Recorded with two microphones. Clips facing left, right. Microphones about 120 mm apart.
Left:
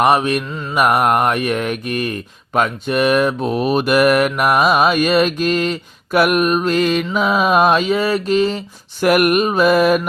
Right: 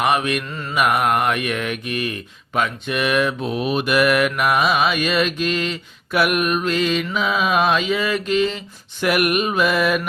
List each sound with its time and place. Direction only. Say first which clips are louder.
0.0 s mantra: left 5 dB; 35° left (ahead or behind)